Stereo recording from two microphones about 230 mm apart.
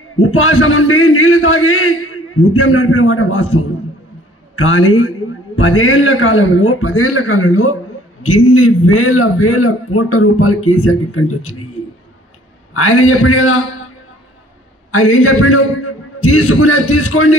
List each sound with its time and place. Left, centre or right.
0.1 s a man's voice: left
12.7 s a man's voice: left
14.9 s a man's voice: left